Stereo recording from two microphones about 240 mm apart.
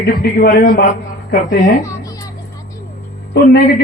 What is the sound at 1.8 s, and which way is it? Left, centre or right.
Music, centre.